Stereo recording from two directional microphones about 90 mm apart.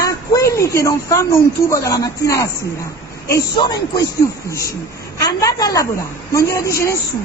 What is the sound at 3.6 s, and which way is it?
Speech, 45° left (ahead or behind).